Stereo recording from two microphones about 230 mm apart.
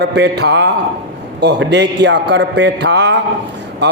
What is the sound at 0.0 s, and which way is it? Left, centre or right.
A man's voice, right.